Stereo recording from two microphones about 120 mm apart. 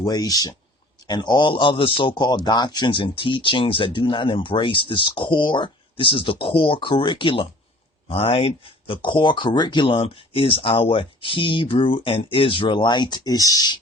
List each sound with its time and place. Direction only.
0.0 s speech: 30° left (ahead or behind)